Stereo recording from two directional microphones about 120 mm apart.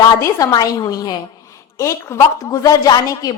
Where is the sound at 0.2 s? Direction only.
30° left (ahead or behind).